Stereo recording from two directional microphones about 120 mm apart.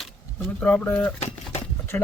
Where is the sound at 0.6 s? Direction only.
15° left (ahead or behind).